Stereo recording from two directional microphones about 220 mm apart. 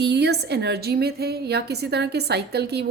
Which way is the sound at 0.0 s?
50° right (ahead or behind).